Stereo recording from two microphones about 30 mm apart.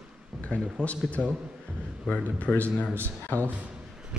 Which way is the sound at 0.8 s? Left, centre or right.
Left.